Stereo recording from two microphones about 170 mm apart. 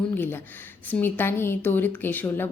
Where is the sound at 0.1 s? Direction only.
10° left (ahead or behind).